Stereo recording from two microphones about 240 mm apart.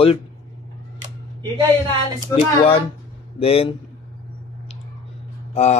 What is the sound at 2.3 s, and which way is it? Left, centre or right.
Speech, left.